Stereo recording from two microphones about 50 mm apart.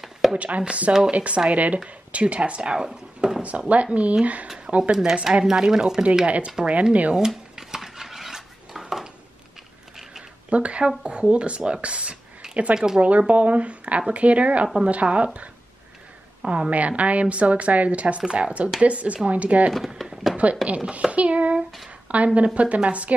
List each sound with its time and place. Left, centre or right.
0.3 s a woman's voice: right
3.4 s a woman's voice: right
4.6 s a sound: right
5.2 s speech: centre
6.2 s a woman's voice: right
7.2 s dishes: centre
10.5 s a woman's voice: right
12.7 s speech: centre
13.3 s a woman's voice: right
20.0 s a sound: centre
20.6 s a woman's voice: right
21.1 s a sound: right
21.5 s a sound: centre
22.0 s a woman's voice: right